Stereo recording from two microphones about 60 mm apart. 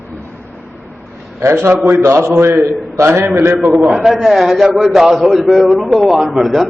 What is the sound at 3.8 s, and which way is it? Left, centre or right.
A man's voice, centre.